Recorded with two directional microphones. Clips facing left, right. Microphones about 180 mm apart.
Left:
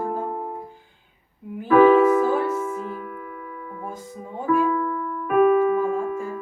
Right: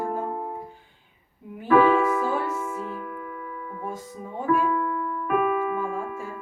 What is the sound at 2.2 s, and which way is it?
Music, centre (ahead or behind).